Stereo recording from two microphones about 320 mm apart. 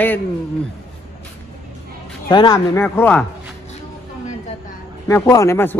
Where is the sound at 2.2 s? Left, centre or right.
Centre.